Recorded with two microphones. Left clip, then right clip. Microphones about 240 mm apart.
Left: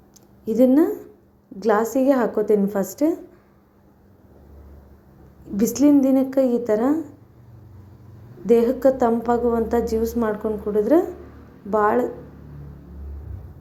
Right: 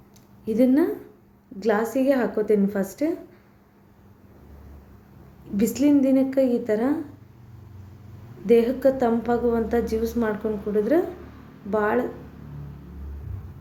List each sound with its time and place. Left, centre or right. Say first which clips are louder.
0.4 s speech: left 4 dB; centre
5.7 s speech: left 3 dB; centre
8.4 s speech: left 2 dB; centre